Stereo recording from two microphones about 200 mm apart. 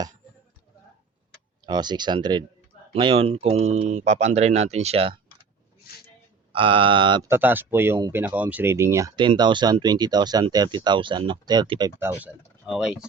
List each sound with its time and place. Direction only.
1.6 s speech: 20° right (ahead or behind)
6.5 s speech: 25° right (ahead or behind)
7.3 s speech: 10° right (ahead or behind)